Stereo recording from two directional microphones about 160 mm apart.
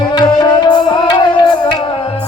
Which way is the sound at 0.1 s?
25° left (ahead or behind).